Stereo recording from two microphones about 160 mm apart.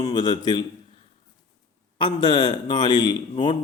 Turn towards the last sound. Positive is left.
turn(degrees=30)  # may be behind; listen again after turning